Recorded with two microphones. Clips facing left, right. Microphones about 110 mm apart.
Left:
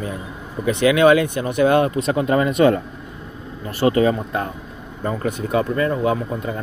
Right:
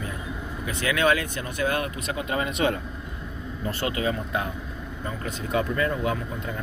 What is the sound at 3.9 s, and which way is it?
Speech, 40° left (ahead or behind).